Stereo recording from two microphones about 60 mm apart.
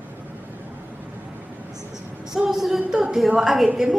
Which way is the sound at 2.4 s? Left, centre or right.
Centre.